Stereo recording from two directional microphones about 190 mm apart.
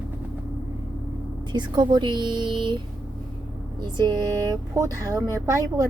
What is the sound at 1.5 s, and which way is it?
Speech, 25° right (ahead or behind).